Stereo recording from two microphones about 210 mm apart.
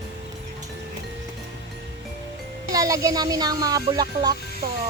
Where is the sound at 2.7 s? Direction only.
15° right (ahead or behind).